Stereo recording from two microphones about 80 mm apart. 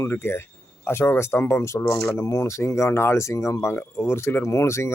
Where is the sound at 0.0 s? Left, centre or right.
Left.